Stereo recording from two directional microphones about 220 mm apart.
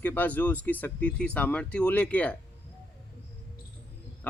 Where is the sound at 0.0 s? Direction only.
10° left (ahead or behind).